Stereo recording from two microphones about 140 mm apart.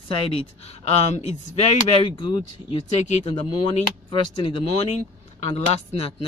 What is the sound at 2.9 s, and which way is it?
Speech, 50° left (ahead or behind).